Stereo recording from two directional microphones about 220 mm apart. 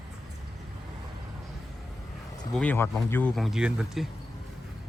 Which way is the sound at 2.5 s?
5° left (ahead or behind).